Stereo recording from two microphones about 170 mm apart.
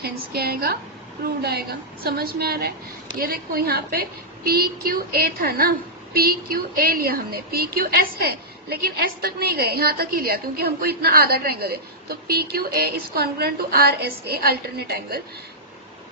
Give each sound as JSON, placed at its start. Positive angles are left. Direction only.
{"t": 0.0, "sound": "a woman's voice", "side_deg": -65}